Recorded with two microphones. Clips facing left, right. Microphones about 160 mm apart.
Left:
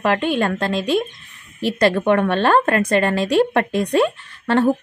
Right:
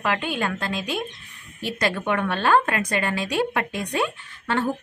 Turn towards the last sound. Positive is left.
turn(degrees=40)  # may be behind; listen again after turning